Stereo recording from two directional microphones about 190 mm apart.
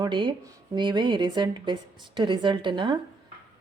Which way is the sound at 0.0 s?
25° right (ahead or behind).